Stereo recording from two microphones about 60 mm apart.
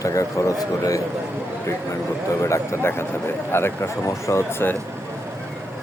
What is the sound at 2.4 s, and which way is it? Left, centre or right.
Speech, left.